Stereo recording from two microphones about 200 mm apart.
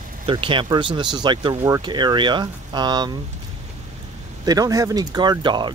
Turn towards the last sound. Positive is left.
turn(degrees=-20)  # may be behind; listen again after turning